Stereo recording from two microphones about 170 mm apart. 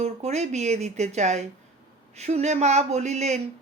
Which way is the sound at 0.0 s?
40° right (ahead or behind).